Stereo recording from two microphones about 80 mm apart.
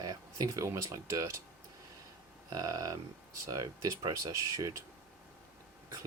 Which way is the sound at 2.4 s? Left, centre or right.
Right.